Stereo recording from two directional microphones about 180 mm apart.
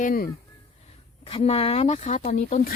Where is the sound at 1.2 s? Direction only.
30° left (ahead or behind); by 2.7 s 45° left (ahead or behind).